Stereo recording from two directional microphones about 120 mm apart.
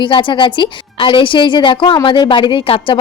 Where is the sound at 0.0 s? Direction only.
45° left (ahead or behind).